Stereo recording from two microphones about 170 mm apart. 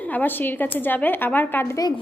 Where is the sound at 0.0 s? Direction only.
10° left (ahead or behind).